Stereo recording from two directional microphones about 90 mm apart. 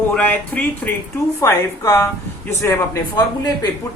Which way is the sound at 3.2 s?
50° left (ahead or behind).